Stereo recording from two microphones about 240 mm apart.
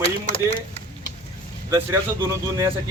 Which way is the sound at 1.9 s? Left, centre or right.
Centre.